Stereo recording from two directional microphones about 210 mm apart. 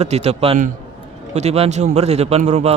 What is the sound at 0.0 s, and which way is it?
A man's voice, 30° right (ahead or behind).